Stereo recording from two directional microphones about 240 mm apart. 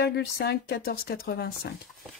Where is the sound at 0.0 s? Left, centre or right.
Left.